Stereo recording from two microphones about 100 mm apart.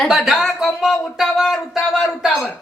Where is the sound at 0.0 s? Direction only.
5° right (ahead or behind).